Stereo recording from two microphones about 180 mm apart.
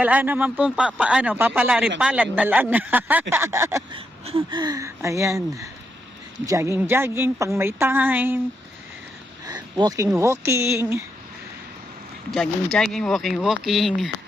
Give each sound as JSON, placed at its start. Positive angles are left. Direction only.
{"t": 0.0, "sound": "speech", "side_deg": -10}
{"t": 3.9, "sound": "speech", "side_deg": -30}
{"t": 9.5, "sound": "a sound", "side_deg": -20}
{"t": 10.2, "sound": "speech", "side_deg": -15}
{"t": 12.7, "sound": "speech", "side_deg": 0}